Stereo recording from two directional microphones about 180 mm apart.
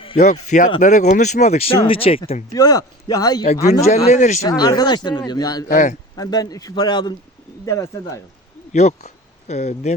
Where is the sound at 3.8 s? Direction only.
40° left (ahead or behind).